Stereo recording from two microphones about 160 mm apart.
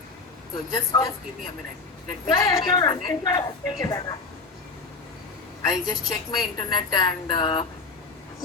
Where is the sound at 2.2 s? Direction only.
30° left (ahead or behind).